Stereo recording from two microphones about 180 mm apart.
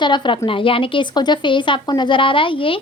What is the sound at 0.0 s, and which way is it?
A woman's voice, 25° left (ahead or behind).